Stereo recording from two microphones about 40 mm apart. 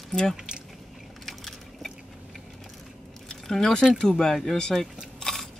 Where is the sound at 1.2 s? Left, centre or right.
Centre.